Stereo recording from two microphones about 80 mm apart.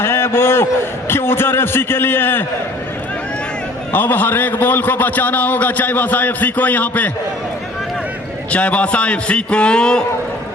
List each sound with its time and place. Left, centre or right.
0.0 s a man's voice: left
3.9 s a man's voice: left
8.4 s a man's voice: centre